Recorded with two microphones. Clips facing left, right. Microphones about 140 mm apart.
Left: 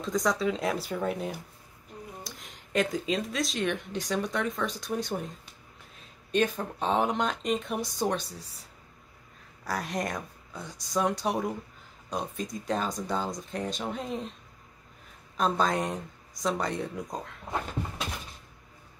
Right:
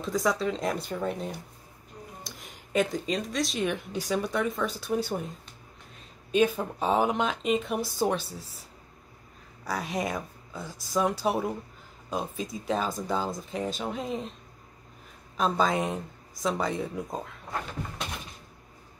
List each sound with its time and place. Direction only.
0.0 s speech: centre (ahead or behind)
6.3 s speech: 10° right (ahead or behind)
9.7 s speech: centre (ahead or behind)
15.3 s speech: centre (ahead or behind)